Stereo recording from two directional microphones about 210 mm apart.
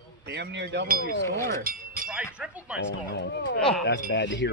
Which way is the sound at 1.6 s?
40° right (ahead or behind).